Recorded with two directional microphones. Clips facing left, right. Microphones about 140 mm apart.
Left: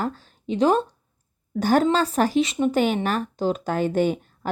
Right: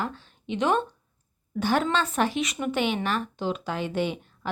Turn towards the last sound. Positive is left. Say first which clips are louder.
# left 6 dB
turn(degrees=45)  # may be behind; listen again after turning